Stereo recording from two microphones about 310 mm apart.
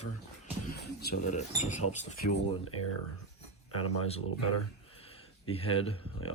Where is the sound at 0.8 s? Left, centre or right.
Left.